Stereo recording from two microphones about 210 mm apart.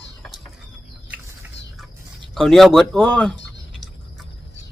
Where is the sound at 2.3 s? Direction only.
Centre (ahead or behind).